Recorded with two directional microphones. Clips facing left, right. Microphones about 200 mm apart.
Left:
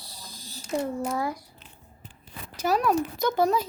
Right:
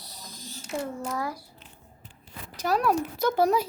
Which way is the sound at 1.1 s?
25° left (ahead or behind).